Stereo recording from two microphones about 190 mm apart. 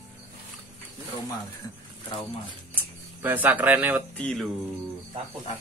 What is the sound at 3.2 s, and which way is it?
Speech, 10° right (ahead or behind).